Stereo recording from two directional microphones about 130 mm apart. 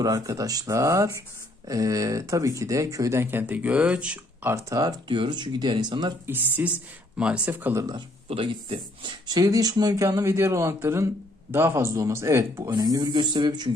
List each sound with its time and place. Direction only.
0.0 s speech: 25° right (ahead or behind); by 4.5 s 10° right (ahead or behind)
4.5 s speech: 30° right (ahead or behind)
6.2 s speech: 15° right (ahead or behind)
7.9 s speech: 40° right (ahead or behind)